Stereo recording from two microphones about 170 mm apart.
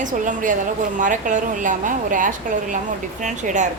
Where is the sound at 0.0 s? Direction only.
50° right (ahead or behind).